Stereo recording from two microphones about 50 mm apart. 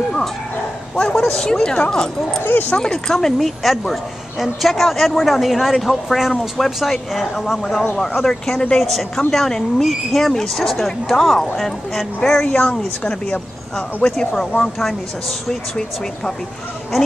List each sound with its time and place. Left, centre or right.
0.9 s a woman's voice: centre
8.5 s a woman's voice: centre
8.8 s a woman's voice: centre
11.3 s a woman's voice: centre